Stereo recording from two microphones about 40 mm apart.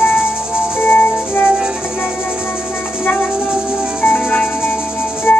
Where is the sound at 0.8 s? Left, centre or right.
Left.